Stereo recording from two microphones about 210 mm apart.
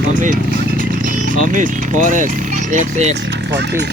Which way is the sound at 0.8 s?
40° right (ahead or behind).